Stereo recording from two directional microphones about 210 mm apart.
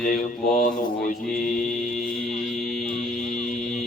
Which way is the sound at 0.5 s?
40° left (ahead or behind).